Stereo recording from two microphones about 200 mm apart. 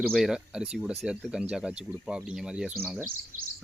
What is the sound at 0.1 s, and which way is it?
Speech, centre (ahead or behind).